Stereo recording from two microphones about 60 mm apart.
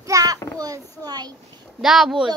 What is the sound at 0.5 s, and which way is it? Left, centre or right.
Speech, right.